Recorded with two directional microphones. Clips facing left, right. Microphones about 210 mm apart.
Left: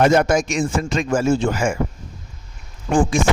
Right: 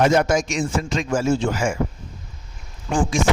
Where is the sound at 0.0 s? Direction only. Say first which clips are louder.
Left 2 dB; 55° left (ahead or behind).